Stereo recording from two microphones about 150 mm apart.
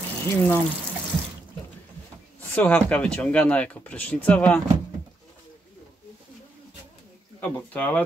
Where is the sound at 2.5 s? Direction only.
10° left (ahead or behind).